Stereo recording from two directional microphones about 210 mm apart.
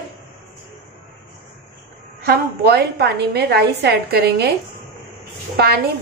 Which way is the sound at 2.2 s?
50° right (ahead or behind).